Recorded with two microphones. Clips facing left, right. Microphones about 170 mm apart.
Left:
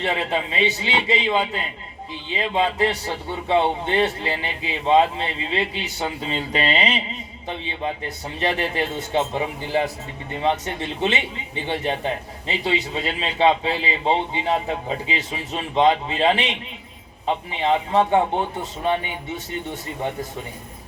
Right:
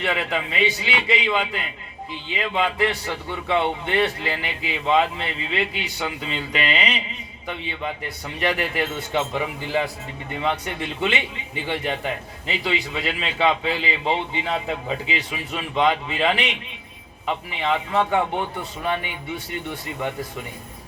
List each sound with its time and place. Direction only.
0.0 s a man's voice: 25° left (ahead or behind)